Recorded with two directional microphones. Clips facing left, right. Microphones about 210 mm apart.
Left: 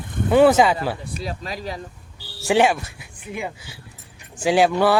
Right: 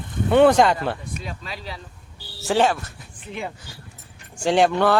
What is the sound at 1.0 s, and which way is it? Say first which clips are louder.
Speech: left 4 dB; 35° left (ahead or behind).